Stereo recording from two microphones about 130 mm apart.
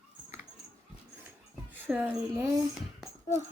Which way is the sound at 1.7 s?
10° right (ahead or behind).